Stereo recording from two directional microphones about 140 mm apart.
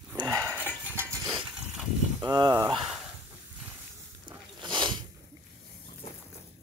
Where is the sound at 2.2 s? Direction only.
30° right (ahead or behind).